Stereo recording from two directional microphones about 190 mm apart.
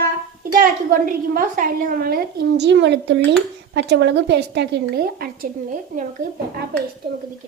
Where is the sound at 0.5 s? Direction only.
50° right (ahead or behind).